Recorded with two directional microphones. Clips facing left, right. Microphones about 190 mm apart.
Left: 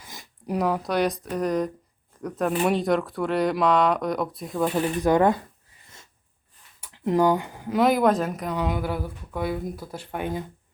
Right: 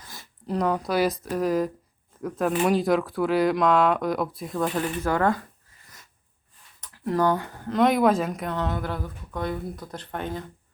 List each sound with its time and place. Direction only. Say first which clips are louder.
0.0 s speech: left 2 dB; 15° left (ahead or behind); by 4.6 s centre (ahead or behind)
5.0 s speech: left 4 dB; 15° left (ahead or behind)
6.9 s speech: left 2 dB; 20° left (ahead or behind)